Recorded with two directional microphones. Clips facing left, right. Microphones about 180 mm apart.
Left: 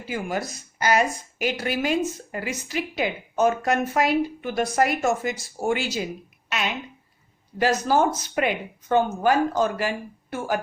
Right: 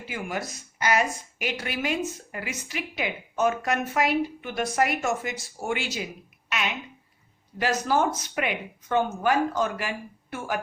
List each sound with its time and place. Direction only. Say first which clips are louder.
0.1 s speech: left 4 dB; 35° left (ahead or behind)
7.6 s speech: left 3 dB; 35° left (ahead or behind)